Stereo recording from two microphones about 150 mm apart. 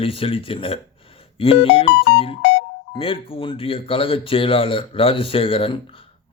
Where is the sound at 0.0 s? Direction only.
40° left (ahead or behind).